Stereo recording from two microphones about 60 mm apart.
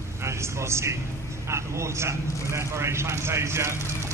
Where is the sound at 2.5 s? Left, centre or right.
Right.